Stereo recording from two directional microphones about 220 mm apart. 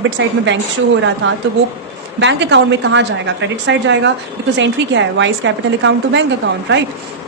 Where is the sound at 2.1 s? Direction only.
55° right (ahead or behind).